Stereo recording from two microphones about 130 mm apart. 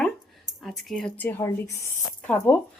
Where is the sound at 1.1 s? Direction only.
15° left (ahead or behind).